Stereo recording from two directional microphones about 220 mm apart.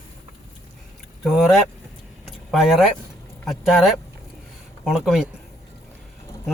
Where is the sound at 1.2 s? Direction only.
Centre (ahead or behind).